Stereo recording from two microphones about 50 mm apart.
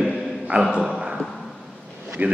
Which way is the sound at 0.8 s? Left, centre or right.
Centre.